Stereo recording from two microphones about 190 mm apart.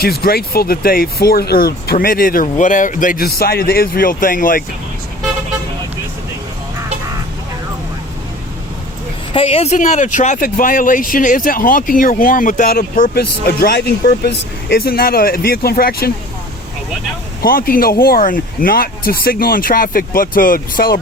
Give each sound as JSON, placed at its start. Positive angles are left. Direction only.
{"t": 0.0, "sound": "speech", "side_deg": 55}
{"t": 9.3, "sound": "speech", "side_deg": 30}
{"t": 17.4, "sound": "speech", "side_deg": 50}